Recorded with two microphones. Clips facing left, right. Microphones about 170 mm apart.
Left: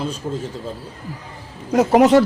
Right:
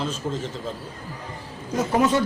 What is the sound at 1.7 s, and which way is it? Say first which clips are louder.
Speech: left 8 dB; 75° left (ahead or behind).